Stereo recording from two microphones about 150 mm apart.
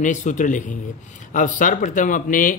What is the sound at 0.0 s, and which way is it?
Speech, 55° left (ahead or behind).